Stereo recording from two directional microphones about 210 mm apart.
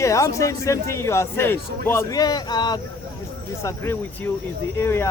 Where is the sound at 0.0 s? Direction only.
15° left (ahead or behind).